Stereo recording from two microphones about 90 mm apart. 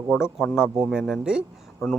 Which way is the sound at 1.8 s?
30° left (ahead or behind).